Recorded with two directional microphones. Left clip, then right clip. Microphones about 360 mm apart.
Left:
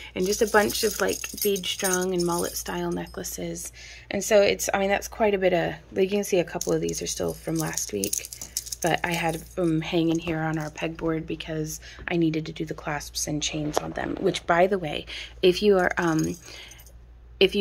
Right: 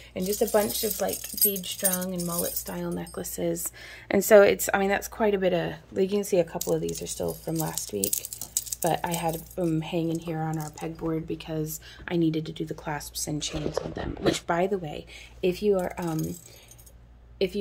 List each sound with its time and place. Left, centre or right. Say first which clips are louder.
0.1 s a woman's voice: left 3 dB; centre
10.0 s speech: left 5 dB; centre
10.3 s a woman's voice: left 4 dB; centre